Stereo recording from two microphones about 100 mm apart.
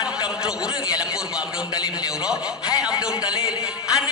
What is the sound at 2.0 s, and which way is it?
Speech, 10° right (ahead or behind).